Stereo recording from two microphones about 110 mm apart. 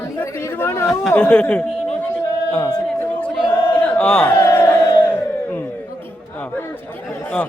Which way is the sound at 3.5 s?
15° left (ahead or behind).